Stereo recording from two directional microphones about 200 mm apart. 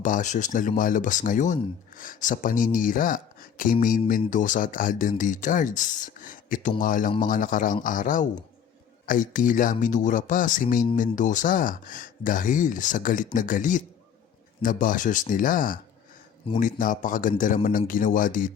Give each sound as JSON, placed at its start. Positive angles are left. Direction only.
{"t": 0.0, "sound": "speech", "side_deg": 40}